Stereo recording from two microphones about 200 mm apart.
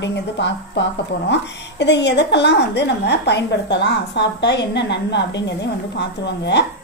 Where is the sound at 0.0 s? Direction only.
60° left (ahead or behind).